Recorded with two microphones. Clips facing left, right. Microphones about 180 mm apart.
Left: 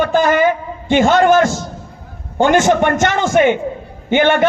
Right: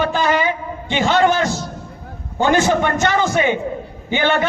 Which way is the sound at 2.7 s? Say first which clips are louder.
Left 3 dB; 50° left (ahead or behind).